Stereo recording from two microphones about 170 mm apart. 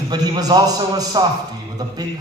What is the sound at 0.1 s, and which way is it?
A man's voice, 25° right (ahead or behind).